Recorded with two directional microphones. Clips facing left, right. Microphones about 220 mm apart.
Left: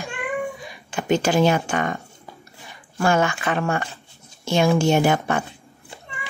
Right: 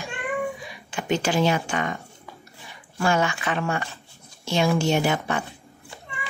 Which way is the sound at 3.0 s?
50° left (ahead or behind).